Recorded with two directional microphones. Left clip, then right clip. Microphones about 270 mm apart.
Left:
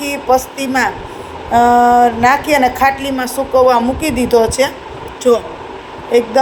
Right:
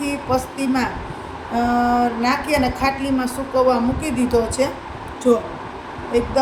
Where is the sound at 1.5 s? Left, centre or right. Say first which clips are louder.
Left 10 dB; left.